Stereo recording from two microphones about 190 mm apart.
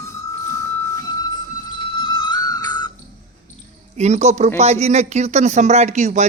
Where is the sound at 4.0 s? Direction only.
35° right (ahead or behind).